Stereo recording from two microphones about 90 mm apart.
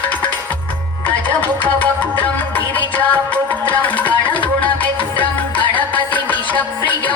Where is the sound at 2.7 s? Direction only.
20° left (ahead or behind).